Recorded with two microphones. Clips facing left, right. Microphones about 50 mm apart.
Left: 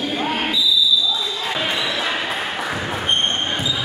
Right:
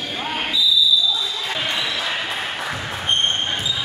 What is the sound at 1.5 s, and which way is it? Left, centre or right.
Basketball bounce, centre.